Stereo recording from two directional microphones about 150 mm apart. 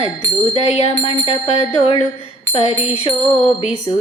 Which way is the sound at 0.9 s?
35° left (ahead or behind).